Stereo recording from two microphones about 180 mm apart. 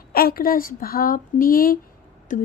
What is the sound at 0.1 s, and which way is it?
A woman's voice, 55° left (ahead or behind).